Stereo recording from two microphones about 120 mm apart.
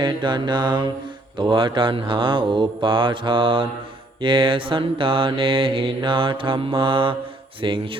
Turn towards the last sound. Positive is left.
turn(degrees=-45)  # may be behind; listen again after turning